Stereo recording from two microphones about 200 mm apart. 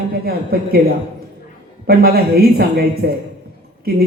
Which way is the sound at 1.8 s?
50° right (ahead or behind).